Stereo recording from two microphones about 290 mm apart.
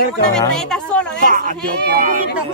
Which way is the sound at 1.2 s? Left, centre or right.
Right.